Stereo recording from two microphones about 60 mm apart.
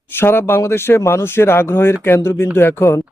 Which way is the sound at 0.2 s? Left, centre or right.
Left.